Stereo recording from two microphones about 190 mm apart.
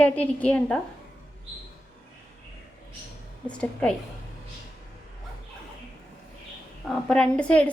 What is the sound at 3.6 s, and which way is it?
Speech, 5° left (ahead or behind).